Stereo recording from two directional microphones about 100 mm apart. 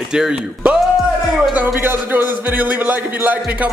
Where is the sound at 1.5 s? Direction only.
20° right (ahead or behind).